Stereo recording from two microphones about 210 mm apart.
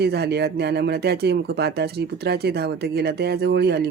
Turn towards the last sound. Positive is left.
turn(degrees=-50)  # may be behind; listen again after turning